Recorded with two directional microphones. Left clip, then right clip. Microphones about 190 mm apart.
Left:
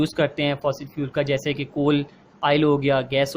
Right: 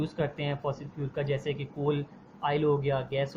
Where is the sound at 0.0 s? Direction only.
50° left (ahead or behind).